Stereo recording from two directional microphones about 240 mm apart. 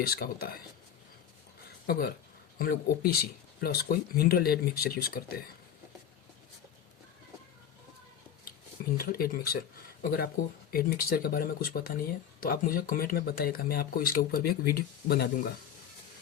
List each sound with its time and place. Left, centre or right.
0.0 s speech: left
1.9 s speech: left
9.0 s speech: left